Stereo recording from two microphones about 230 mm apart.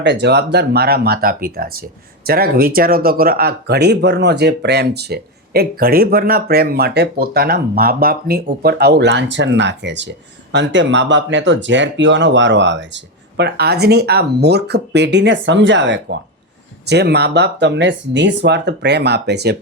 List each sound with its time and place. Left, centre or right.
0.0 s speech: right